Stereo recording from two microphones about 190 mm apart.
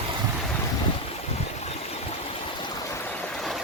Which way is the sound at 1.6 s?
30° left (ahead or behind).